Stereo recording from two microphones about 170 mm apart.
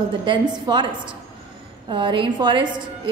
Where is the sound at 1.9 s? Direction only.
30° right (ahead or behind).